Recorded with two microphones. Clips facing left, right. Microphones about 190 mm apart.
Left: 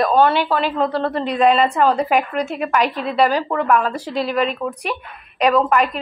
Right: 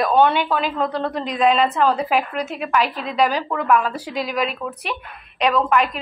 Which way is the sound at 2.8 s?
40° left (ahead or behind).